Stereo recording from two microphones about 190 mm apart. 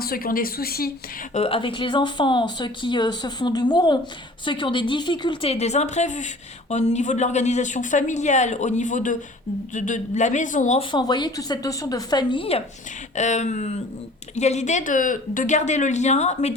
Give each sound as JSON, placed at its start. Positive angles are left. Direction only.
{"t": 0.0, "sound": "a woman's voice", "side_deg": 50}
{"t": 1.3, "sound": "a woman's voice", "side_deg": 30}
{"t": 10.9, "sound": "a woman's voice", "side_deg": 25}